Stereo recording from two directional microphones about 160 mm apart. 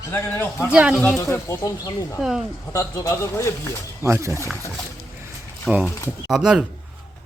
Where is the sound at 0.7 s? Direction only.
5° right (ahead or behind).